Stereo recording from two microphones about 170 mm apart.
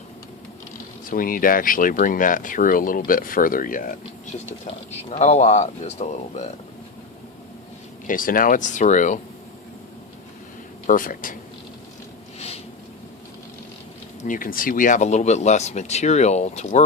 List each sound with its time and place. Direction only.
1.1 s speech: 55° left (ahead or behind)
5.1 s speech: 40° left (ahead or behind)
8.0 s speech: 55° left (ahead or behind)
10.8 s speech: 55° left (ahead or behind)
14.3 s speech: 55° left (ahead or behind)